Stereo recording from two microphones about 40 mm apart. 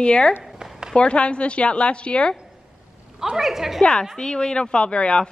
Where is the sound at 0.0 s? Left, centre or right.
Left.